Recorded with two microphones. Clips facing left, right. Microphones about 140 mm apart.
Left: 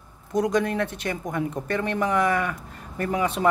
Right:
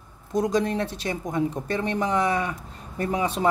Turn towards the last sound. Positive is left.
turn(degrees=-25)  # may be behind; listen again after turning